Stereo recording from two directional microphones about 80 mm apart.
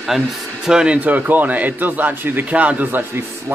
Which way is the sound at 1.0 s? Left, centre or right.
Right.